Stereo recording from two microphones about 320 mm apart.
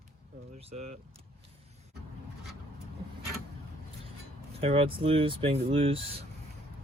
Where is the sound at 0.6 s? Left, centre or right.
Centre.